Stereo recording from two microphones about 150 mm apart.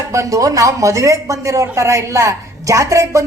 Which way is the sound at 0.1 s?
20° right (ahead or behind).